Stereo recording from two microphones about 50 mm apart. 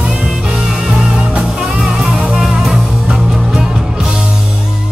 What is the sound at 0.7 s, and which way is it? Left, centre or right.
Music, centre.